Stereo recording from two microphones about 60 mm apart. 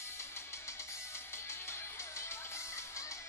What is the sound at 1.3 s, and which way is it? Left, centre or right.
Music, left.